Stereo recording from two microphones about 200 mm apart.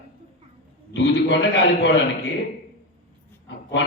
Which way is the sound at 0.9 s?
65° left (ahead or behind).